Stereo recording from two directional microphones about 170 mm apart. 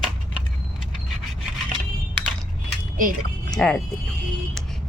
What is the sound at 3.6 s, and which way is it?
Speech, 5° left (ahead or behind).